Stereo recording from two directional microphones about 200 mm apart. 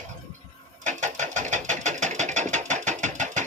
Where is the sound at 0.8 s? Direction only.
40° right (ahead or behind).